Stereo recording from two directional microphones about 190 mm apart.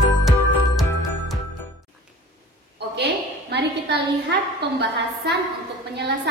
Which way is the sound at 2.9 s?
65° right (ahead or behind).